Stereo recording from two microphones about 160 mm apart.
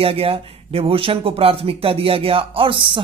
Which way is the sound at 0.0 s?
35° right (ahead or behind).